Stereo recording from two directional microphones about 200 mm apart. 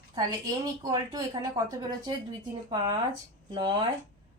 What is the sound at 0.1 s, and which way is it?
A woman's voice, 20° right (ahead or behind).